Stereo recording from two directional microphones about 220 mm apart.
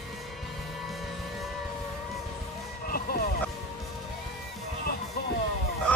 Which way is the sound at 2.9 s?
45° left (ahead or behind).